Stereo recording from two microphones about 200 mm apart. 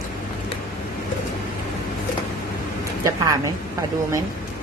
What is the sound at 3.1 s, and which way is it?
Speech, 15° right (ahead or behind).